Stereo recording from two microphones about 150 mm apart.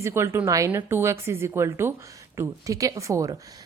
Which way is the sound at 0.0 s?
15° right (ahead or behind).